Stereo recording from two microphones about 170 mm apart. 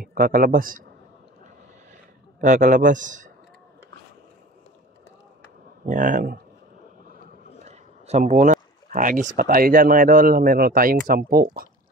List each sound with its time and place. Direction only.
0.0 s speech: 55° right (ahead or behind)
2.4 s a man's voice: 50° right (ahead or behind)
5.9 s a man's voice: 50° right (ahead or behind)
7.6 s a sound: 45° right (ahead or behind)
9.4 s speech: 60° right (ahead or behind)